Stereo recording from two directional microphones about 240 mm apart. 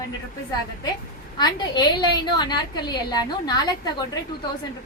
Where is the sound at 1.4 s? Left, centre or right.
Centre.